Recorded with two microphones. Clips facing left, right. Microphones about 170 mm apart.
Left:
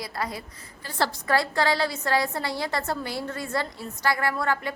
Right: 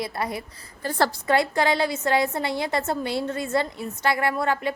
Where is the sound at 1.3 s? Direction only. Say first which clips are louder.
Right 1 dB; 20° right (ahead or behind).